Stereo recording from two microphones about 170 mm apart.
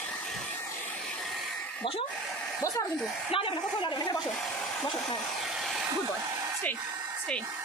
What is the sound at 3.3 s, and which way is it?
Speech, 30° left (ahead or behind).